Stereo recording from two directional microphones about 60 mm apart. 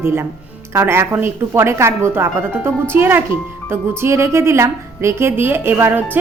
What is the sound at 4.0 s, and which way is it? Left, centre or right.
A woman's voice, right.